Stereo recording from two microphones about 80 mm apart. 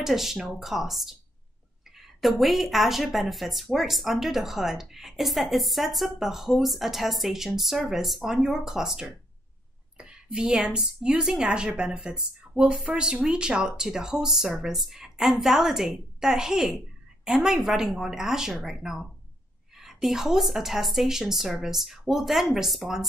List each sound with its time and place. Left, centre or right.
0.0 s a woman's voice: centre